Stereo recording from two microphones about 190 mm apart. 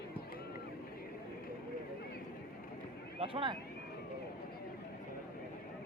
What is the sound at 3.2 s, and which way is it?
Speech, 30° right (ahead or behind).